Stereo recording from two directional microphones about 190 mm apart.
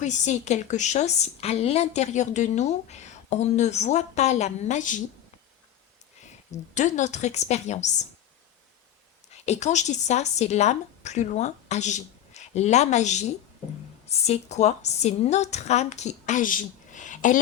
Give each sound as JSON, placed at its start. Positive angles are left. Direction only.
{"t": 0.0, "sound": "a woman's voice", "side_deg": 40}
{"t": 6.7, "sound": "a woman's voice", "side_deg": 40}
{"t": 9.3, "sound": "a woman's voice", "side_deg": 35}